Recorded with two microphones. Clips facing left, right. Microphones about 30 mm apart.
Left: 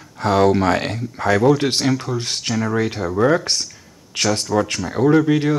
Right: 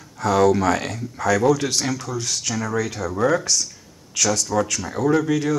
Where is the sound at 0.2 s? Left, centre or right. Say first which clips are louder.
Left 2 dB; left.